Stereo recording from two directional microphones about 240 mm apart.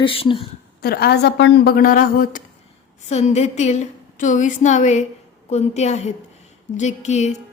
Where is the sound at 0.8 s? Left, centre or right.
Left.